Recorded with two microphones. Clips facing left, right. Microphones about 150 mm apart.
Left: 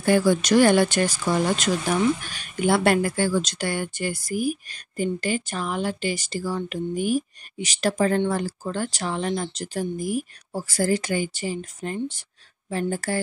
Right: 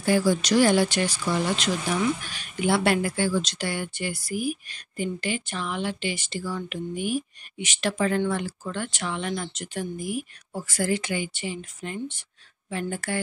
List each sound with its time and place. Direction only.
0.0 s speech: 55° left (ahead or behind); by 13.2 s 35° left (ahead or behind)